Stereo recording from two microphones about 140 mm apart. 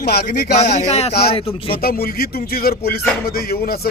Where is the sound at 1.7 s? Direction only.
90° left.